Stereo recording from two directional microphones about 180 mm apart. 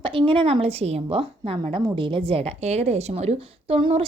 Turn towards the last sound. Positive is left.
turn(degrees=-30)  # may be behind; listen again after turning